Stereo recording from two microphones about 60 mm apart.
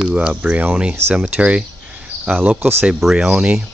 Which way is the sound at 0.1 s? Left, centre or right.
Centre.